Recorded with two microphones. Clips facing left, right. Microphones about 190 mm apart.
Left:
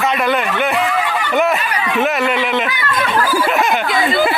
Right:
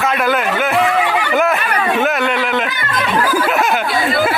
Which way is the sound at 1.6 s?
55° right (ahead or behind).